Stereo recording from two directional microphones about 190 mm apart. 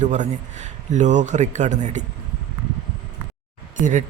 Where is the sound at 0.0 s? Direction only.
40° right (ahead or behind).